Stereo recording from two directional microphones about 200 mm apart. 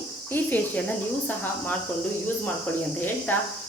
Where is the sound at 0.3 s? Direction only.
10° left (ahead or behind).